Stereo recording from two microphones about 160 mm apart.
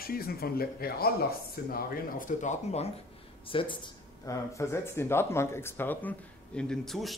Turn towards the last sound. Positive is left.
turn(degrees=0)  # may be behind; listen again after turning